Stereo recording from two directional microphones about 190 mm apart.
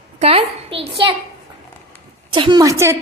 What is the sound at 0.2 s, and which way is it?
Speech, 30° right (ahead or behind).